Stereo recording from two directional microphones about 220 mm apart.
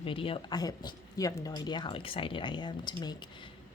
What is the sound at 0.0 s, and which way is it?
Speech, 25° left (ahead or behind).